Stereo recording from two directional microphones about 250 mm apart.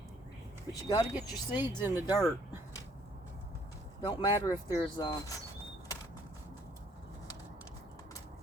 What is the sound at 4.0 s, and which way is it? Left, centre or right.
Speech, centre.